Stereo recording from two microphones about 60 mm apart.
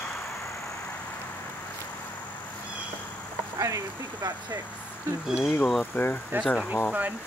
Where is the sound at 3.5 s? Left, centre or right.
Right.